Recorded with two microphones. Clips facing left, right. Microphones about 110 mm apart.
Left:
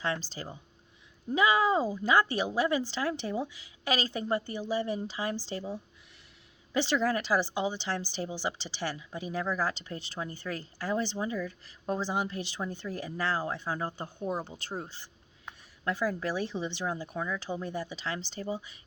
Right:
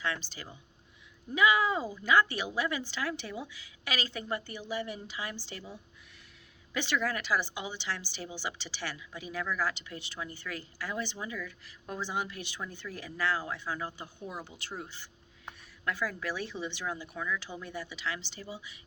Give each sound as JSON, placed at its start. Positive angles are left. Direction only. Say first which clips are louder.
{"t": 0.0, "sound": "a woman's voice", "louder": "left 3 dB", "side_deg": 35}